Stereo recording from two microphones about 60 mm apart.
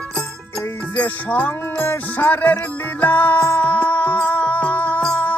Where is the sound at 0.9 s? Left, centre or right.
Left.